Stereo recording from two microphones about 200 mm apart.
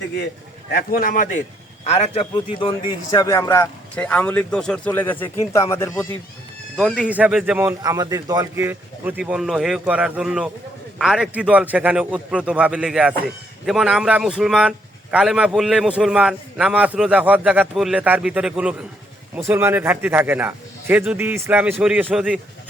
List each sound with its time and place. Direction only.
0.7 s speech: 45° left (ahead or behind); by 6.1 s 15° left (ahead or behind)
6.7 s a man's voice: centre (ahead or behind)